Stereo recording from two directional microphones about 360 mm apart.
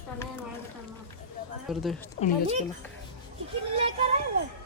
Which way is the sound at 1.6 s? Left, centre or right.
Centre.